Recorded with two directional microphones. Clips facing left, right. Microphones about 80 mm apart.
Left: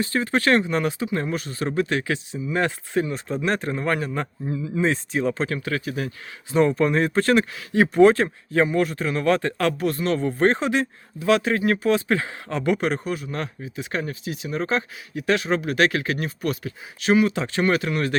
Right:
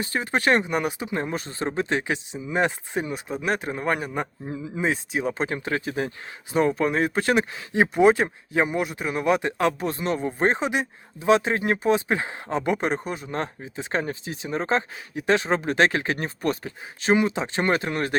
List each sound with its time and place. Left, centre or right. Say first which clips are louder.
0.0 s speech: left 2 dB; centre
4.5 s speech: left 5 dB; right
4.8 s speech: left 2 dB; centre; by 6.1 s right
6.5 s speech: left 3 dB; centre